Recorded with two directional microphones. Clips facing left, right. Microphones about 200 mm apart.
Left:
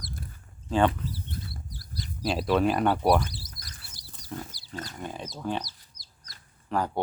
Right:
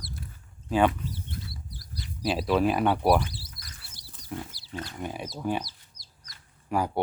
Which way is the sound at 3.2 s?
40° left (ahead or behind).